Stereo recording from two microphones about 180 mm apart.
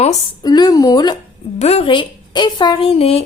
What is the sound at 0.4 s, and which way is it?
Speech, 20° left (ahead or behind).